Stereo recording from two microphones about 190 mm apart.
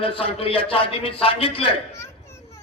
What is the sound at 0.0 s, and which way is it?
Speech, 30° left (ahead or behind).